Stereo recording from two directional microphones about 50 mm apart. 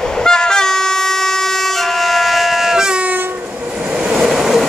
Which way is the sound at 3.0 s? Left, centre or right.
Right.